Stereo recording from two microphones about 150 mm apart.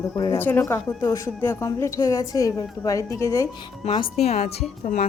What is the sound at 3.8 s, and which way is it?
Speech, 40° left (ahead or behind).